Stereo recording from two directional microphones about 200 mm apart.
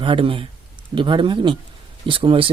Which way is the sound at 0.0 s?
25° right (ahead or behind).